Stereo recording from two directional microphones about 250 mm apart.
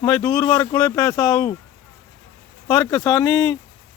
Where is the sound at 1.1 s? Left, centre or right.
Centre.